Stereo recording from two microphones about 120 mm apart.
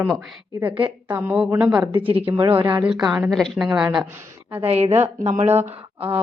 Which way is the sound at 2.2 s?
25° right (ahead or behind).